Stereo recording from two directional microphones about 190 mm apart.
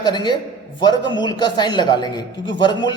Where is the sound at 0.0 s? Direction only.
25° left (ahead or behind).